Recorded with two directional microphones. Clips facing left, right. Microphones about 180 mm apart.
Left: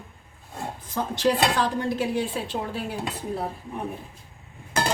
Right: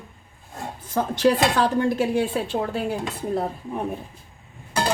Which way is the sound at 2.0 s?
45° right (ahead or behind).